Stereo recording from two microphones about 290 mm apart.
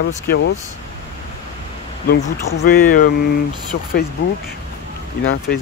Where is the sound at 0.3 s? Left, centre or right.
Left.